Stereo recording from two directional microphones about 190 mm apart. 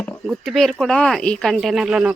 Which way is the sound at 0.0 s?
5° left (ahead or behind).